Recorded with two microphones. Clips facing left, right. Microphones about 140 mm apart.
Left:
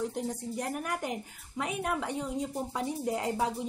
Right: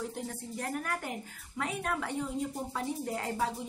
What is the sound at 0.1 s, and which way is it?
A woman's voice, 15° left (ahead or behind).